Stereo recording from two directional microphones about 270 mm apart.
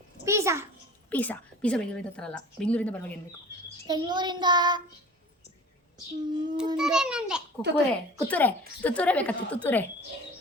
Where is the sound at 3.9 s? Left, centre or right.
Centre.